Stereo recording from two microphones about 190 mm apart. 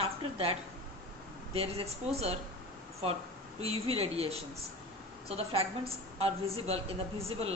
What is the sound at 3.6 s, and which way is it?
A woman's voice, 30° right (ahead or behind).